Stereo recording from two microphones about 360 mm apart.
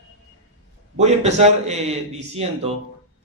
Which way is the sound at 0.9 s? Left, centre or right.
Centre.